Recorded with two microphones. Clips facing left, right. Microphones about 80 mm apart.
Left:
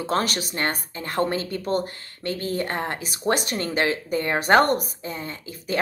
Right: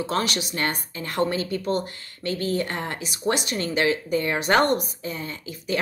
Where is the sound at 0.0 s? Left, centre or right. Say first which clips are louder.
Left 1 dB; left.